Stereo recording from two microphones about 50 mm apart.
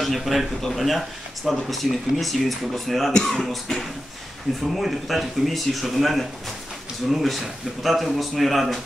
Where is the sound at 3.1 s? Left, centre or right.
Centre.